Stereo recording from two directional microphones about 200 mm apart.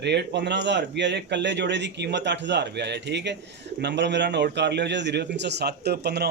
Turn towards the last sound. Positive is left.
turn(degrees=-55)  # may be behind; listen again after turning